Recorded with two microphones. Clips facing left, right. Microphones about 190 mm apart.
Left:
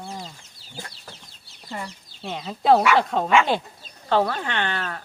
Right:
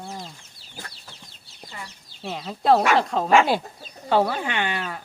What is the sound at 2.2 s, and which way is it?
Speech, centre (ahead or behind).